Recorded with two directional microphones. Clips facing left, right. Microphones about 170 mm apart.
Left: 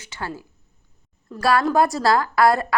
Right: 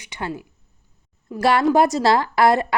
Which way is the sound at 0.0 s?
20° right (ahead or behind).